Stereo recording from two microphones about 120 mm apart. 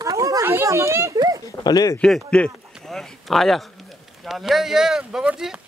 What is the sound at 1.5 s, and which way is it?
Speech, 30° left (ahead or behind).